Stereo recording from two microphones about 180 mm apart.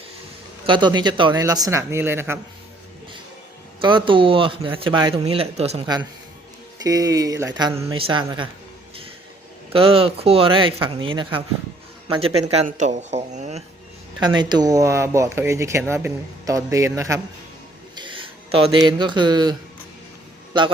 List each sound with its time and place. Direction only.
0.7 s speech: 25° right (ahead or behind)
3.8 s speech: 25° right (ahead or behind)
6.8 s speech: 20° right (ahead or behind)
9.7 s speech: 30° right (ahead or behind)
14.3 s speech: 25° right (ahead or behind)
18.5 s speech: 30° right (ahead or behind)